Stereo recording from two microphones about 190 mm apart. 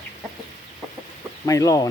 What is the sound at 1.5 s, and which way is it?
Speech, 20° left (ahead or behind).